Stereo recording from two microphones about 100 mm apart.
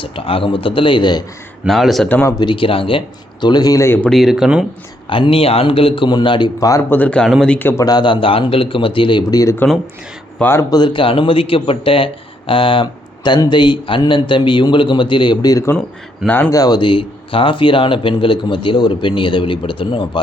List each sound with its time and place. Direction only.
0.0 s speech: 65° left (ahead or behind)
1.6 s speech: centre (ahead or behind)
2.4 s speech: 55° left (ahead or behind)
3.4 s speech: 45° left (ahead or behind)
4.1 s speech: 5° right (ahead or behind)
5.0 s speech: 60° left (ahead or behind)
6.6 s speech: 35° left (ahead or behind)
6.9 s speech: 15° left (ahead or behind)
7.8 s speech: 45° left (ahead or behind)
10.3 s speech: 20° left (ahead or behind)
10.6 s speech: 40° left (ahead or behind); by 20.2 s 60° left (ahead or behind)